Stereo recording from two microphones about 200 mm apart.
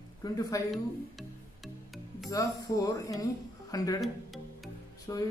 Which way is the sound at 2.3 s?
15° left (ahead or behind).